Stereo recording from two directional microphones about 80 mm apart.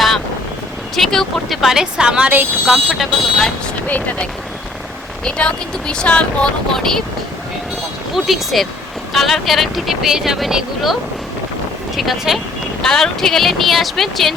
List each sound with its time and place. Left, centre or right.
0.9 s speech: centre
2.7 s speech: centre
3.8 s speech: centre
5.9 s speech: centre
8.1 s speech: centre
11.9 s speech: centre